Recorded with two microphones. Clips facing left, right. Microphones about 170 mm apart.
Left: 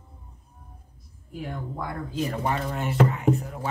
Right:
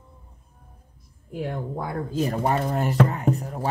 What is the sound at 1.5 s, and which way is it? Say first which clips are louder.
Speech: right 1 dB; 45° right (ahead or behind).